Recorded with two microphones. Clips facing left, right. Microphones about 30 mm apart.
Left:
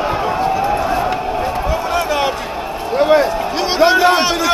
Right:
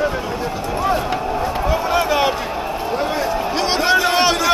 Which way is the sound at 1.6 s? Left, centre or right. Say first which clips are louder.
Even; centre.